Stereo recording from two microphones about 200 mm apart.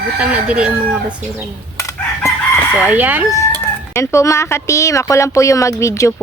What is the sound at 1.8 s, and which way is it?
Crowing, 15° left (ahead or behind).